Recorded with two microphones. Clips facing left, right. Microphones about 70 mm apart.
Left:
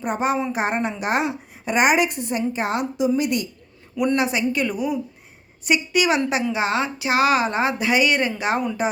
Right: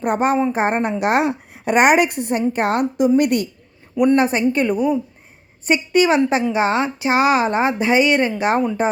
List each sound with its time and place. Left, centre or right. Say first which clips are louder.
0.0 s a woman's voice: right 4 dB; right
0.3 s a woman's voice: right 5 dB; right
0.9 s a woman's voice: right 5 dB; right
4.2 s a woman's voice: right 5 dB; right